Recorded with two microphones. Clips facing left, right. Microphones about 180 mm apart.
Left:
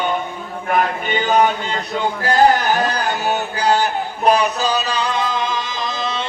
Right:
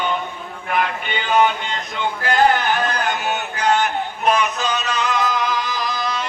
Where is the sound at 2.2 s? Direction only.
40° left (ahead or behind).